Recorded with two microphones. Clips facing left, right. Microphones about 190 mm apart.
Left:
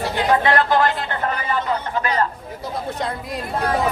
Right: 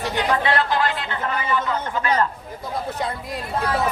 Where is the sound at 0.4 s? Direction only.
45° left (ahead or behind).